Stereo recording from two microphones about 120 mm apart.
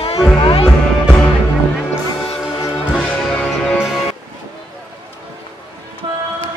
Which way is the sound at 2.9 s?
10° left (ahead or behind).